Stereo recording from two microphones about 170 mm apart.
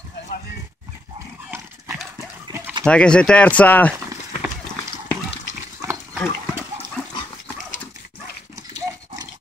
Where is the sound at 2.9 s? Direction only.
5° left (ahead or behind).